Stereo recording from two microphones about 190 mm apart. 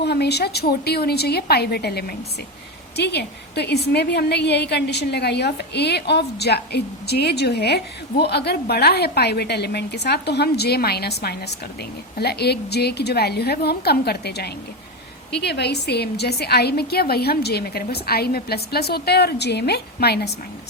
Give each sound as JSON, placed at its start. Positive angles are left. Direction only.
{"t": 0.0, "sound": "a woman's voice", "side_deg": 60}